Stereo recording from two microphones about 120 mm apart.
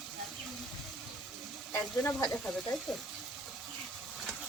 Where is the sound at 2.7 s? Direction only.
5° left (ahead or behind).